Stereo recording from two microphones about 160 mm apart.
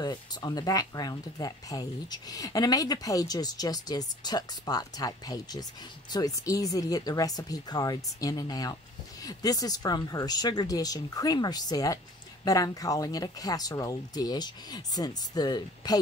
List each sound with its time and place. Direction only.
0.0 s speech: 25° left (ahead or behind)